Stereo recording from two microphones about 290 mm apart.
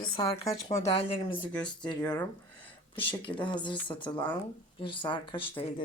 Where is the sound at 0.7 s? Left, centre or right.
Centre.